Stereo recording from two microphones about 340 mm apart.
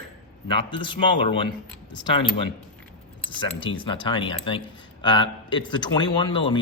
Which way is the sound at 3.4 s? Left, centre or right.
Centre.